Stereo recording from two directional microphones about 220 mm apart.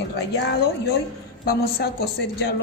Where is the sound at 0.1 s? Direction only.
50° left (ahead or behind).